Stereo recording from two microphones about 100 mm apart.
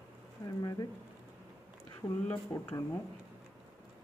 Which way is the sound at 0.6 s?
40° left (ahead or behind).